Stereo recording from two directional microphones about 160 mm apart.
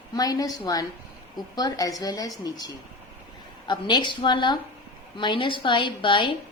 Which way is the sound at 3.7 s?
30° left (ahead or behind).